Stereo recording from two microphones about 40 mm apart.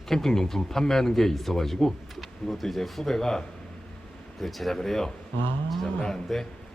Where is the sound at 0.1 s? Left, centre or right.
Centre.